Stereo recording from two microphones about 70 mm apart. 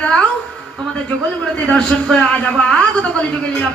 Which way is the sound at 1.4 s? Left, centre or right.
Centre.